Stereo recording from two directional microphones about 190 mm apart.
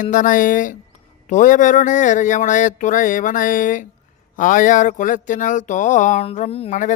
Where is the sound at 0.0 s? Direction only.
45° left (ahead or behind).